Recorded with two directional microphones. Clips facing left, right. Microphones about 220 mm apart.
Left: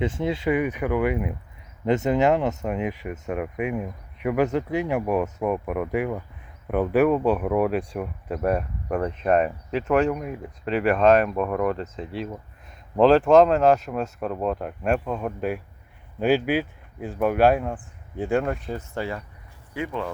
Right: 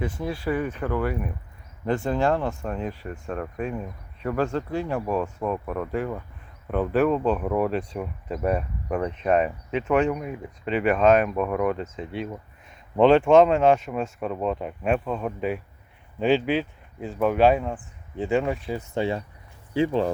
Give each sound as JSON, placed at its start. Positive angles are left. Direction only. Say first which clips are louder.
{"t": 0.0, "sound": "speech", "louder": "left 4 dB", "side_deg": 25}
{"t": 18.8, "sound": "speech", "louder": "right 4 dB", "side_deg": -25}